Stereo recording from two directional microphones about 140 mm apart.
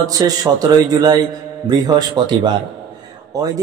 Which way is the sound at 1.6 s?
35° right (ahead or behind).